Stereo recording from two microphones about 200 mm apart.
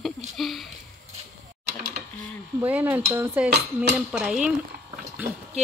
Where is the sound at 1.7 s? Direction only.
55° right (ahead or behind).